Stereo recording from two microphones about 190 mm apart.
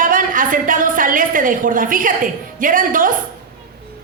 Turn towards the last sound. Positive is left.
turn(degrees=-45)  # may be behind; listen again after turning